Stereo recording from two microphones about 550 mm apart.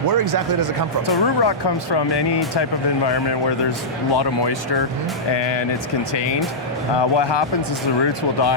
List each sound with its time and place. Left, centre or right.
0.1 s speech: right
1.2 s speech: left
6.9 s speech: left